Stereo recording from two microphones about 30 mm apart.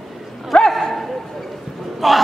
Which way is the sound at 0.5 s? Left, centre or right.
Left.